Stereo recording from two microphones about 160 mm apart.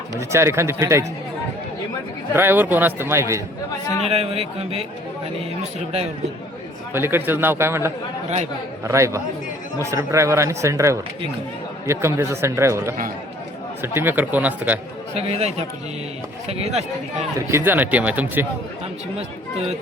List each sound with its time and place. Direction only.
0.2 s speech: 15° right (ahead or behind)
2.3 s speech: 15° right (ahead or behind)
4.0 s a man's voice: 40° right (ahead or behind)
6.9 s speech: 15° right (ahead or behind)
15.1 s a man's voice: 40° right (ahead or behind)
17.3 s speech: 15° right (ahead or behind)